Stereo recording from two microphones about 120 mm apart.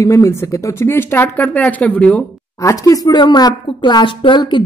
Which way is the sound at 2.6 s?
30° left (ahead or behind).